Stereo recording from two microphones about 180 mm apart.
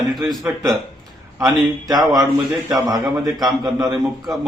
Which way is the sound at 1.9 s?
20° right (ahead or behind).